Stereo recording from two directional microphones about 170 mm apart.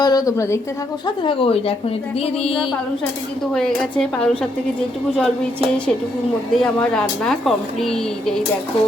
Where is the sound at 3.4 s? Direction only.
5° left (ahead or behind).